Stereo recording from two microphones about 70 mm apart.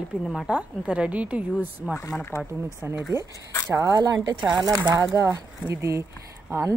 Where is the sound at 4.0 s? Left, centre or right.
Right.